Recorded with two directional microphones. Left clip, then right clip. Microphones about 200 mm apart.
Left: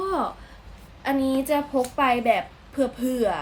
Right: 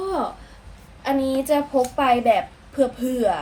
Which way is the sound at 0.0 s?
Centre (ahead or behind).